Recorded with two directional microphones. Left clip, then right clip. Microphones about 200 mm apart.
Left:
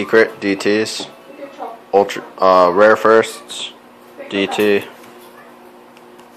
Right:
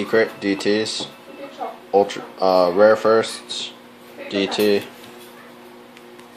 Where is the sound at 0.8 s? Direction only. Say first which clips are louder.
Left 4 dB; 5° right (ahead or behind).